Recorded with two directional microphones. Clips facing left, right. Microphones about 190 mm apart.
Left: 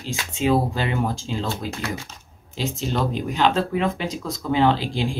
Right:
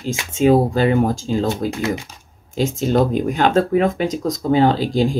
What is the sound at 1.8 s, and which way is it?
Speech, 20° right (ahead or behind).